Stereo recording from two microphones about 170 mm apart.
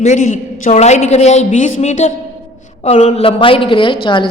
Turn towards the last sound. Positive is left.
turn(degrees=30)  # may be behind; listen again after turning